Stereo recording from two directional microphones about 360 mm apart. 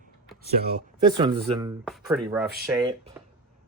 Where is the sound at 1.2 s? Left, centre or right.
Centre.